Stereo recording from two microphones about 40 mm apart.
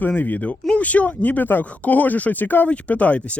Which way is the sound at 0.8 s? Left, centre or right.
Left.